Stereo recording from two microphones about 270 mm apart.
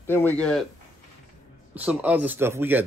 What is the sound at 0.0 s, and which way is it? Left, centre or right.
Speech, centre.